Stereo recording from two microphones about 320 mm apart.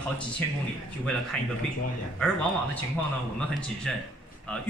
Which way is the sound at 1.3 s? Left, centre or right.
Centre.